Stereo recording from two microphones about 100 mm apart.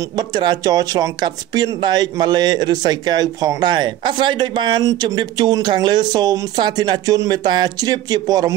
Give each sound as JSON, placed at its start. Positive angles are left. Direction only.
{"t": 0.1, "sound": "speech", "side_deg": -45}